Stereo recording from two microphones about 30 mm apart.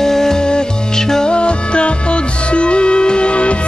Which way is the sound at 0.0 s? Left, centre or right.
Centre.